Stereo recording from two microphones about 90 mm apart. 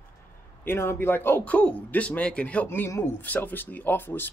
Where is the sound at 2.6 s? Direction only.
25° left (ahead or behind).